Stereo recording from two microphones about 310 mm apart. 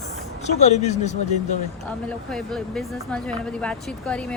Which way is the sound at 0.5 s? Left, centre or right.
Left.